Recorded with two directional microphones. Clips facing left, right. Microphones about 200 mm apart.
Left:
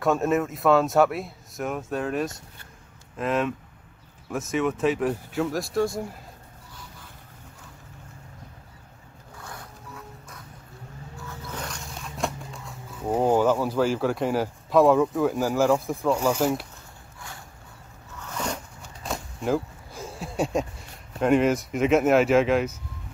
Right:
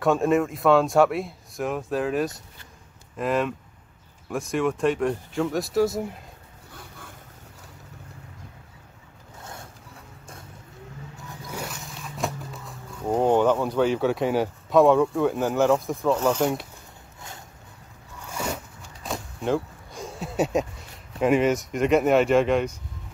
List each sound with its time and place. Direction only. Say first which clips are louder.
0.0 s speech: right 2 dB; centre (ahead or behind)
6.7 s vehicle: right 4 dB; 55° right (ahead or behind)
9.4 s boat: even; 25° right (ahead or behind)
11.2 s a sound: right 1 dB; 10° right (ahead or behind)
13.1 s speech: right 1 dB; 5° left (ahead or behind)
18.2 s zipper: even; 10° right (ahead or behind)
19.0 s speech: even; centre (ahead or behind)